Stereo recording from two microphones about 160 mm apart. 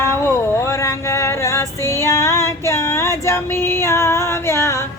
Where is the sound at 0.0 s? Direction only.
15° left (ahead or behind).